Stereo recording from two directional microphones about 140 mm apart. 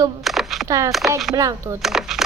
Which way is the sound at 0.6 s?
20° right (ahead or behind).